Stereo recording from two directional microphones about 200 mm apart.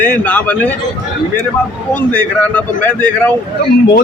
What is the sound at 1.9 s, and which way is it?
Speech, 5° left (ahead or behind).